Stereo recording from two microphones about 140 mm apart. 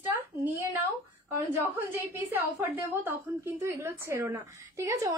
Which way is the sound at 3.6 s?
20° right (ahead or behind).